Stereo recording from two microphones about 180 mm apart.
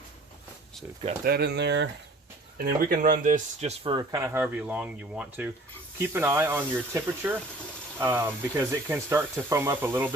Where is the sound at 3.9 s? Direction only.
15° right (ahead or behind).